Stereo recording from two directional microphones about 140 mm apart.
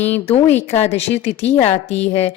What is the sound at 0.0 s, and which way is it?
Speech, 15° left (ahead or behind).